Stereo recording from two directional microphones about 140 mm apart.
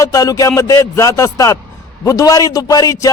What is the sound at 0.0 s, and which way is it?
A man's voice, 25° left (ahead or behind).